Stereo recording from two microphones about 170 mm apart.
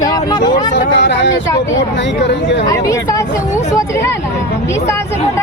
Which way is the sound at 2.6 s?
20° left (ahead or behind).